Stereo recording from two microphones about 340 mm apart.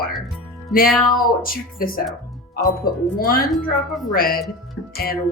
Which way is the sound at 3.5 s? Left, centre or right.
Centre.